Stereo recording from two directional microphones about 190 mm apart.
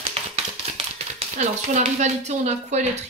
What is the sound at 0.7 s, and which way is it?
Speech, 35° right (ahead or behind).